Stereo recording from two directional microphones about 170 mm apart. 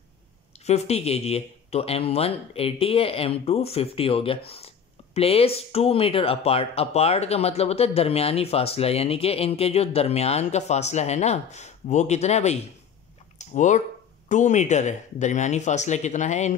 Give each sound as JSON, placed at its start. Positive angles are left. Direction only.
{"t": 0.7, "sound": "speech", "side_deg": 40}